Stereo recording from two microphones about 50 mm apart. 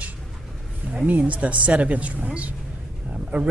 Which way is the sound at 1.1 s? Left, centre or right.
Right.